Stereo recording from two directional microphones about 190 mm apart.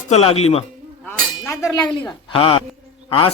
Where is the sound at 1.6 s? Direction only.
25° left (ahead or behind).